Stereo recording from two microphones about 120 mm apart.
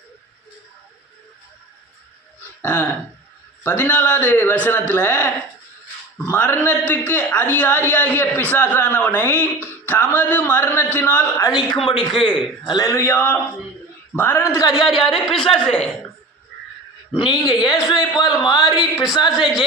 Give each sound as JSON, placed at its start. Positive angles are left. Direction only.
{"t": 2.6, "sound": "a sound", "side_deg": 20}
{"t": 3.6, "sound": "a man's voice", "side_deg": 15}
{"t": 11.4, "sound": "a man's voice", "side_deg": 35}
{"t": 12.9, "sound": "a man's voice", "side_deg": 20}
{"t": 14.8, "sound": "speech", "side_deg": 0}
{"t": 17.1, "sound": "a man's voice", "side_deg": 40}